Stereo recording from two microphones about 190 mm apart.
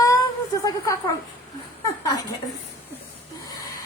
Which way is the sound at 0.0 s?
15° left (ahead or behind).